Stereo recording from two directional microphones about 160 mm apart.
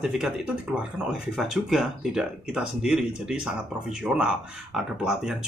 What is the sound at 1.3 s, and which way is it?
Speech, centre (ahead or behind).